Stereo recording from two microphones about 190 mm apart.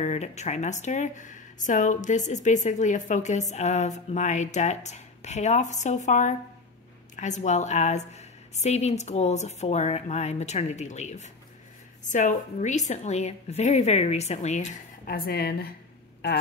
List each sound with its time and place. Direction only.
0.0 s speech: 35° left (ahead or behind)
15.0 s a woman's voice: 50° left (ahead or behind)